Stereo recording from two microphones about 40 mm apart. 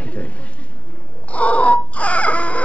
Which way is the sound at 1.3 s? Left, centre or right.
Left.